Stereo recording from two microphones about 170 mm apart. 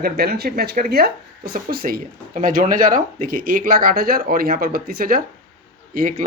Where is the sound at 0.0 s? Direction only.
65° right (ahead or behind).